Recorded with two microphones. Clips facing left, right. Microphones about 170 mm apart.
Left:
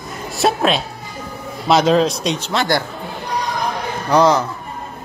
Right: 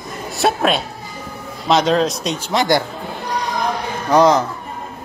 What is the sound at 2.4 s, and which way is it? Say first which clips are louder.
Speech: right 4 dB; 15° right (ahead or behind).